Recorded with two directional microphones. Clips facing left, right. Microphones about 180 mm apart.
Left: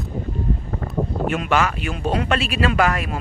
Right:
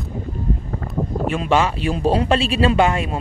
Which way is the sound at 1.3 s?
30° right (ahead or behind).